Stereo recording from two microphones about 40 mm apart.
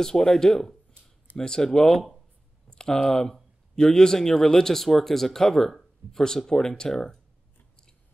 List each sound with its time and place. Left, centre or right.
0.0 s speech: centre